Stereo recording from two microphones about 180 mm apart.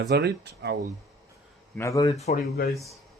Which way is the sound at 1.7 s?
15° left (ahead or behind).